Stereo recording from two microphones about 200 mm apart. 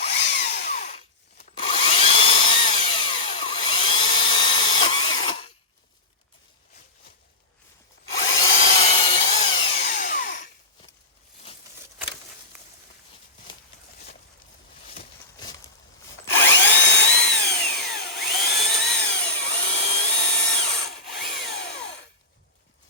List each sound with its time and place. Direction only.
0.0 s drill: 60° left (ahead or behind)
0.8 s drill: 35° left (ahead or behind)
4.5 s tools: 25° left (ahead or behind)
8.1 s drill: 65° left (ahead or behind)
8.4 s wood: 35° left (ahead or behind)
9.3 s tools: 30° left (ahead or behind)
16.2 s drill: 65° left (ahead or behind)
18.4 s tools: 55° left (ahead or behind)
19.6 s a sound: 60° left (ahead or behind)
20.0 s tools: 60° left (ahead or behind)